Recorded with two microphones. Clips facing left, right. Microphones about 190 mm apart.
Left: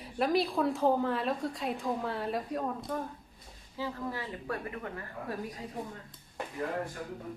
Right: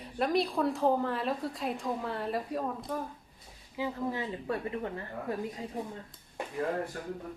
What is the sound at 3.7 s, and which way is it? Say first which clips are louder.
Speech: right 3 dB; 20° right (ahead or behind).